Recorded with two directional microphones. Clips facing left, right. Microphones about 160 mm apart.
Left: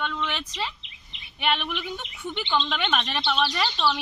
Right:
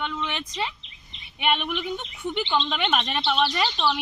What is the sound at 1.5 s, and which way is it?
Speech, 15° right (ahead or behind).